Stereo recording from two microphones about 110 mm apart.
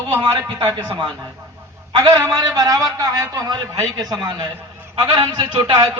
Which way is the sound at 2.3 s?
35° right (ahead or behind).